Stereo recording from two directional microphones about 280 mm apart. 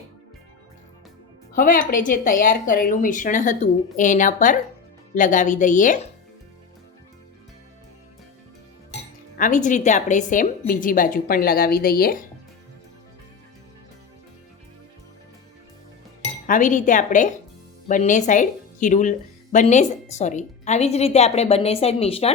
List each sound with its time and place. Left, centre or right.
1.5 s speech: left
9.4 s speech: left
16.5 s speech: left